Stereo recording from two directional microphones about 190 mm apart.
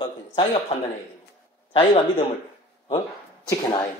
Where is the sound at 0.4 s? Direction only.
30° left (ahead or behind).